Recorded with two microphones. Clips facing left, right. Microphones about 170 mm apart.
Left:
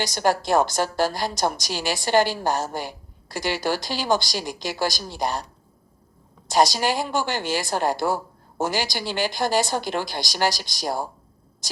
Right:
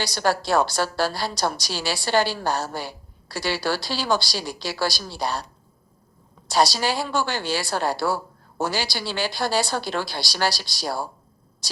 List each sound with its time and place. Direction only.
0.0 s a woman's voice: 15° left (ahead or behind)
6.5 s a woman's voice: 20° left (ahead or behind)